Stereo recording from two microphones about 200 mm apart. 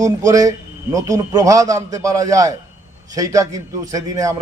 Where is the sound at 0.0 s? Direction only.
15° right (ahead or behind).